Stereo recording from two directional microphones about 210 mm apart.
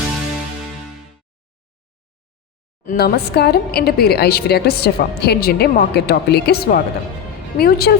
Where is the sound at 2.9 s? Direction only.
50° left (ahead or behind).